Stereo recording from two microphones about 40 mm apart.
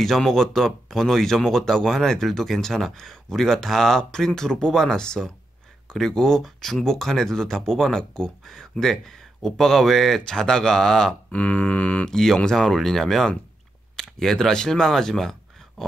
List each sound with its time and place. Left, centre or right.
0.0 s speech: centre
10.2 s speech: centre
11.3 s a sound: left
12.1 s speech: centre